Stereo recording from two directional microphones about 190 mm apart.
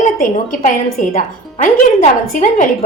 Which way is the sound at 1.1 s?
45° left (ahead or behind).